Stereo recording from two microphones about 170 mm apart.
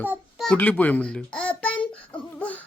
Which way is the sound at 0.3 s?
5° left (ahead or behind).